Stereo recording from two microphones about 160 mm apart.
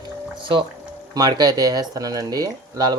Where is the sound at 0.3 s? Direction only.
30° right (ahead or behind).